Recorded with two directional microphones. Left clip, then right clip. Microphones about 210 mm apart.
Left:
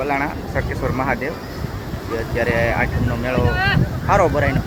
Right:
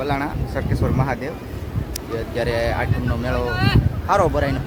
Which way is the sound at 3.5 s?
35° right (ahead or behind).